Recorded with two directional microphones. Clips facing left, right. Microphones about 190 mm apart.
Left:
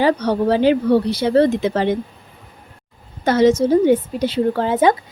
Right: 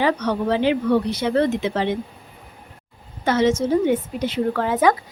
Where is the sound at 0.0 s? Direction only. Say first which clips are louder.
Left 4 dB; 35° left (ahead or behind).